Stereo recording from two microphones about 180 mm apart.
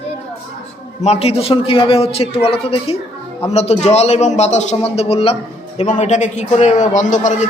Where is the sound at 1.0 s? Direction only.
35° left (ahead or behind).